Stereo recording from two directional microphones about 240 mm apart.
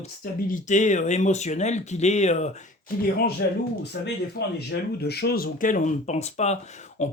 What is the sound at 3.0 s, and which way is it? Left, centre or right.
Speech, left.